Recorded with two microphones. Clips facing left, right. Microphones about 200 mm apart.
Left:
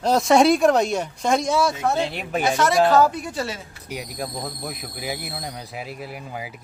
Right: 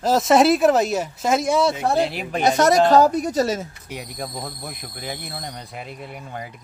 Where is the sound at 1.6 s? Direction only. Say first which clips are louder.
Right 2 dB; 25° right (ahead or behind).